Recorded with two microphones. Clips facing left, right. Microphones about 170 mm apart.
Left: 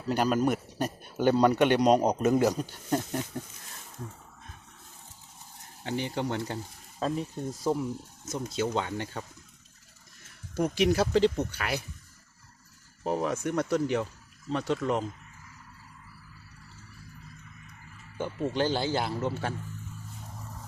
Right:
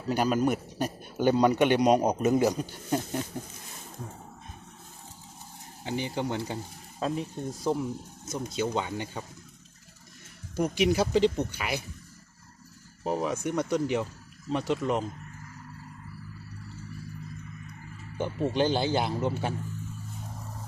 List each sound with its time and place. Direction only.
0.1 s a man's voice: 5° right (ahead or behind)
5.8 s a man's voice: 5° right (ahead or behind)
10.5 s a man's voice: centre (ahead or behind)
13.1 s a man's voice: centre (ahead or behind)
18.2 s speech: 15° right (ahead or behind)